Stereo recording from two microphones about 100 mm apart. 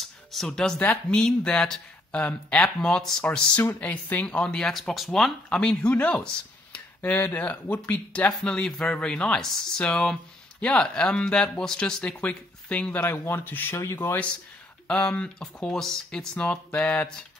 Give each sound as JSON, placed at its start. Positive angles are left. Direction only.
{"t": 0.3, "sound": "speech", "side_deg": 5}
{"t": 3.3, "sound": "speech", "side_deg": 15}
{"t": 15.1, "sound": "speech", "side_deg": 10}